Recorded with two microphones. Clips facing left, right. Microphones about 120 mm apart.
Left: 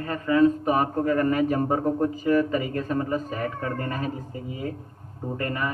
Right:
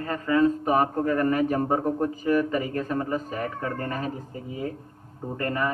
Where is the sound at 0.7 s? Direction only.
10° left (ahead or behind).